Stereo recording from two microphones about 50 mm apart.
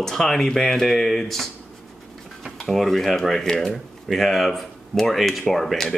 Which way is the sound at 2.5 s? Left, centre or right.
Centre.